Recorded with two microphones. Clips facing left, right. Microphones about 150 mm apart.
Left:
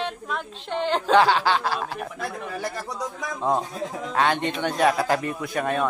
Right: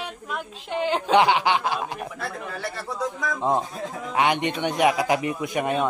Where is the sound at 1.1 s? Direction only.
20° right (ahead or behind).